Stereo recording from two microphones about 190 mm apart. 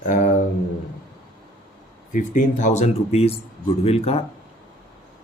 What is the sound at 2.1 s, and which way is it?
Speech, 45° left (ahead or behind).